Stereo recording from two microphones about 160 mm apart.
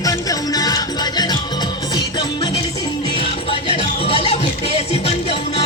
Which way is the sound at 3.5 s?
35° left (ahead or behind).